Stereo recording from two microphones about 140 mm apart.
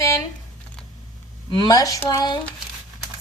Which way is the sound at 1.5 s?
30° left (ahead or behind).